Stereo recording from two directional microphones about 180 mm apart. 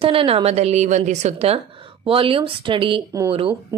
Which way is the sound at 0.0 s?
30° right (ahead or behind).